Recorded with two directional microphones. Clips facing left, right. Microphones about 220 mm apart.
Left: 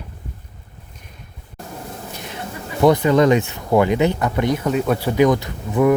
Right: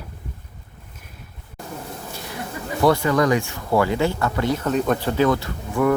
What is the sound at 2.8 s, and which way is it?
Speech, 20° left (ahead or behind).